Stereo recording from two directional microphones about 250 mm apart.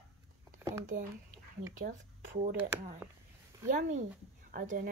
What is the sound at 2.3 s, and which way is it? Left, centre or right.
Speech, right.